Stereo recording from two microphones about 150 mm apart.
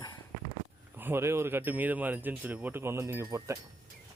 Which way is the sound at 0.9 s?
15° right (ahead or behind).